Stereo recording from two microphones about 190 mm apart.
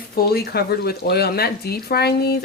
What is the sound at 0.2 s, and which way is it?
Speech, 55° left (ahead or behind).